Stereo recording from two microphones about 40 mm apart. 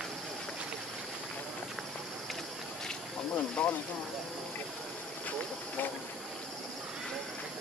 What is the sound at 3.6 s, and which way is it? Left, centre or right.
Snake, left.